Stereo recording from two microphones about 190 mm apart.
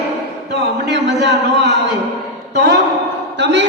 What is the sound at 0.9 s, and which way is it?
Speech, 65° right (ahead or behind).